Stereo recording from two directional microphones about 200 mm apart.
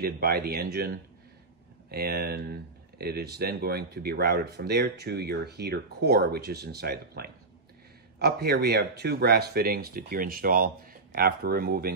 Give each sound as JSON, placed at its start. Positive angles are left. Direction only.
{"t": 0.0, "sound": "speech", "side_deg": -50}